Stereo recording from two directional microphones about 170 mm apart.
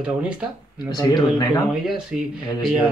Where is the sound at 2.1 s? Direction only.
Centre (ahead or behind).